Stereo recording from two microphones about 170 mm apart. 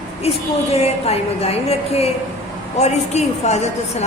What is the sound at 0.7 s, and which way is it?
A woman's voice, 35° left (ahead or behind).